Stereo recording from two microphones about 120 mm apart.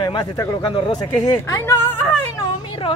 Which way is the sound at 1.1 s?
25° left (ahead or behind).